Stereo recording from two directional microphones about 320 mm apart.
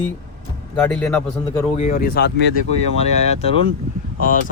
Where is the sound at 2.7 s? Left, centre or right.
Centre.